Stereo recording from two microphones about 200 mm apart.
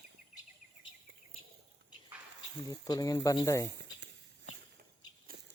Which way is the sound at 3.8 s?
60° right (ahead or behind).